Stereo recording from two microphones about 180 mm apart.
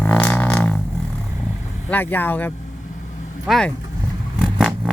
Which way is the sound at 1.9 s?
10° left (ahead or behind).